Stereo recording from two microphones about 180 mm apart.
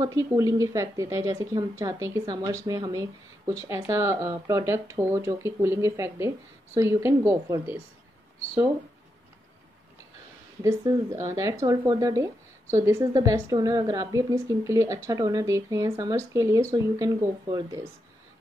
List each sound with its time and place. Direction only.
0.0 s a woman's voice: 20° right (ahead or behind)
10.6 s a woman's voice: 15° right (ahead or behind)